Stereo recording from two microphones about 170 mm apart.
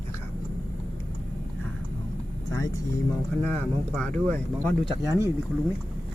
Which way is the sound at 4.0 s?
10° left (ahead or behind).